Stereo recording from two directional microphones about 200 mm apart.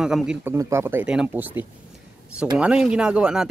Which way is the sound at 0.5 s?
15° right (ahead or behind).